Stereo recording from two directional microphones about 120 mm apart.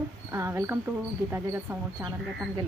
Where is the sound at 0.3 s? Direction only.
20° right (ahead or behind).